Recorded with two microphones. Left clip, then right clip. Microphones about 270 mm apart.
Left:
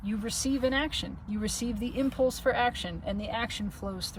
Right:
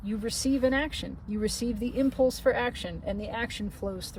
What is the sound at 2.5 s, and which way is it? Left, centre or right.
Speech, centre.